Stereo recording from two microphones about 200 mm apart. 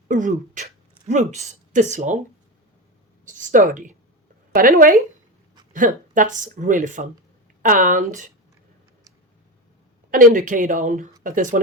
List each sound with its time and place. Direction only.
0.1 s speech: 40° right (ahead or behind)
3.2 s a woman's voice: 40° right (ahead or behind)
10.1 s a woman's voice: 45° right (ahead or behind)